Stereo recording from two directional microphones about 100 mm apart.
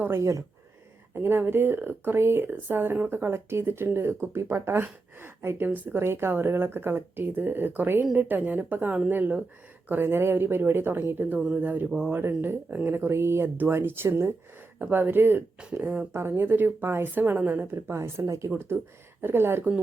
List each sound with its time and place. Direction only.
0.0 s a woman's voice: 25° right (ahead or behind)